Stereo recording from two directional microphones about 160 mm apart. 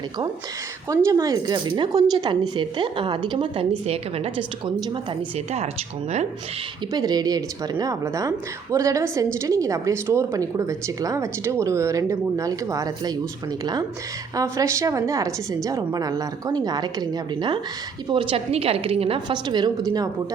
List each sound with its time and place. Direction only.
0.9 s a woman's voice: 20° right (ahead or behind)
6.9 s a woman's voice: 25° right (ahead or behind)
14.3 s a woman's voice: 20° right (ahead or behind)